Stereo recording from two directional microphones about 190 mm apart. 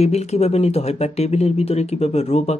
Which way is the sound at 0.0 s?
35° left (ahead or behind).